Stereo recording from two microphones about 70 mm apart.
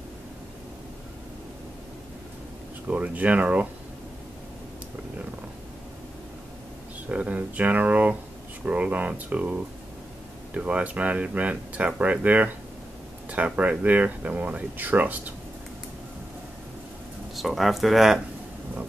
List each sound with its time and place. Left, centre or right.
2.9 s speech: centre
7.1 s speech: centre
17.4 s speech: centre